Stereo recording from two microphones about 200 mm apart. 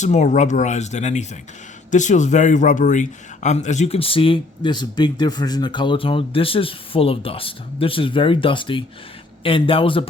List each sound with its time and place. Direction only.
0.0 s speech: 35° left (ahead or behind)